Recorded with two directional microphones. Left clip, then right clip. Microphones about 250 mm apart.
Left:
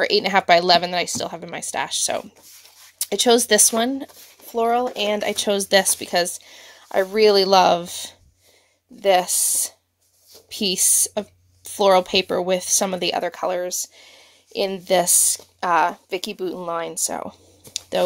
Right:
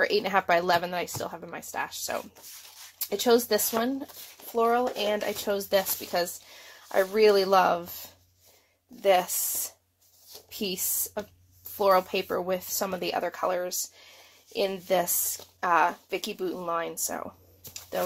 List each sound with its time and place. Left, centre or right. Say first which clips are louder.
0.2 s speech: left 8 dB; left
9.0 s speech: left 6 dB; left
17.7 s a sound: left 9 dB; left